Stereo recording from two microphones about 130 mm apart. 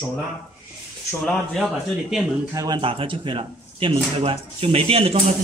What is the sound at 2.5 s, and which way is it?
Speech, 25° right (ahead or behind).